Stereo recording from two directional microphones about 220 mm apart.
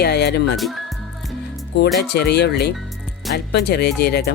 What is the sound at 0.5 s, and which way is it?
Speech, centre (ahead or behind).